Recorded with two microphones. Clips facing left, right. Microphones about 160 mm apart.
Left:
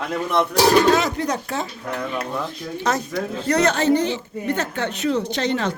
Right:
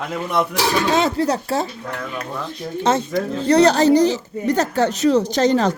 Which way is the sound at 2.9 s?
25° right (ahead or behind).